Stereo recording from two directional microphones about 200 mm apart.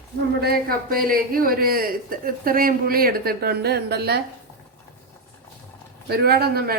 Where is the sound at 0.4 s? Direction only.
45° right (ahead or behind).